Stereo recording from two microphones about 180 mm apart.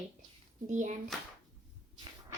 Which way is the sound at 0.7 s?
45° right (ahead or behind).